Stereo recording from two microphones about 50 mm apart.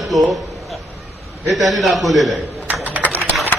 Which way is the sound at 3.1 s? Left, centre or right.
Right.